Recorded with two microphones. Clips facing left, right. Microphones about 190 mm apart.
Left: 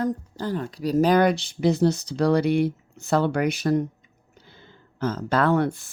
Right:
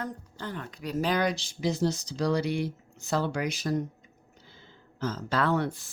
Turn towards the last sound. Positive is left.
turn(degrees=55)  # may be behind; listen again after turning